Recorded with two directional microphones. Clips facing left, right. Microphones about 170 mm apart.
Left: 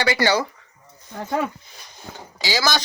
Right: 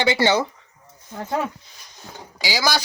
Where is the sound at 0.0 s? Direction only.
20° right (ahead or behind).